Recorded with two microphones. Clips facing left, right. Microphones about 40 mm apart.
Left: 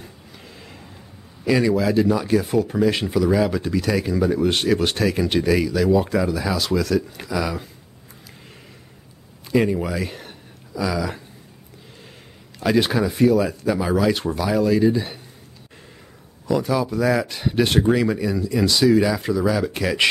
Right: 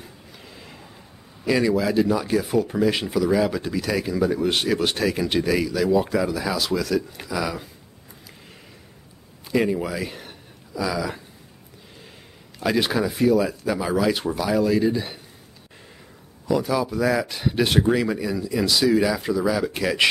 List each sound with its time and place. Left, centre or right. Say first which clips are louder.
0.0 s a sound: left 1 dB; centre
1.4 s speech: left 2 dB; centre
9.7 s speech: left 2 dB; centre
12.5 s speech: left 3 dB; centre
16.4 s speech: left 1 dB; centre